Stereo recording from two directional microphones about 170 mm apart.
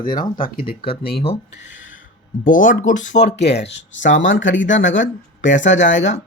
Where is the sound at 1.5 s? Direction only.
90° left.